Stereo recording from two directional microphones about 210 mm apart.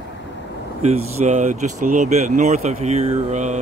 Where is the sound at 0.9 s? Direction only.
30° right (ahead or behind).